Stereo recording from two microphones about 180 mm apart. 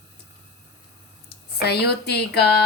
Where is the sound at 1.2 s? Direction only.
65° left (ahead or behind).